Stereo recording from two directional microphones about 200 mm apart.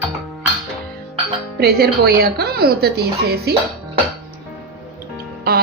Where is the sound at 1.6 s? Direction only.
50° right (ahead or behind).